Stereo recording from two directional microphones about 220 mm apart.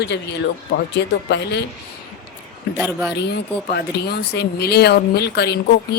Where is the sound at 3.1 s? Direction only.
50° left (ahead or behind).